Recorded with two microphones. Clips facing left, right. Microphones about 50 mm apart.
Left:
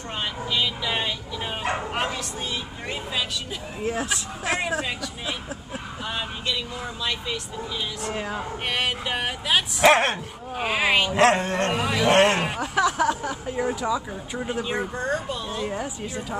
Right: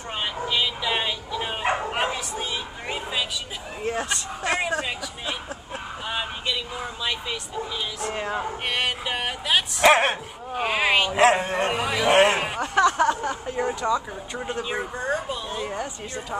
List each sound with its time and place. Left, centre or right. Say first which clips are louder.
0.5 s speech: right 1 dB; centre
1.6 s bow-wow: right 2 dB; right
3.8 s speech: even; centre
6.0 s speech: right 1 dB; centre